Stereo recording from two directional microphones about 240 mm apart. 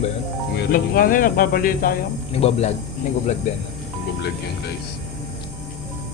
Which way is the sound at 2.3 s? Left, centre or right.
Left.